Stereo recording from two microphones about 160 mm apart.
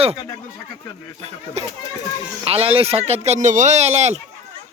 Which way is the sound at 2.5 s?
35° right (ahead or behind).